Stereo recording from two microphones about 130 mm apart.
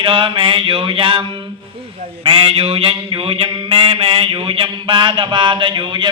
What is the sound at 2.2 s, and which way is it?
Mantra, 45° right (ahead or behind).